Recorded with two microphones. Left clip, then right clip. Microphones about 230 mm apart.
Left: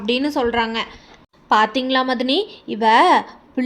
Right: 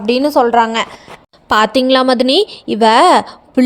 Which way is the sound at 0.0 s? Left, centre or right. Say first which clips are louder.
Right 8 dB; right.